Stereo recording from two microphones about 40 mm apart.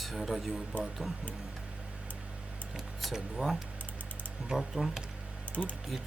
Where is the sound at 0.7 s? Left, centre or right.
Left.